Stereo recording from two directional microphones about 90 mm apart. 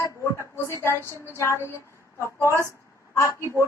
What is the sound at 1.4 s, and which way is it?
Speech, 30° left (ahead or behind).